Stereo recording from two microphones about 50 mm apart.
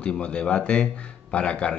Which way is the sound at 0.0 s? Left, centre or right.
Left.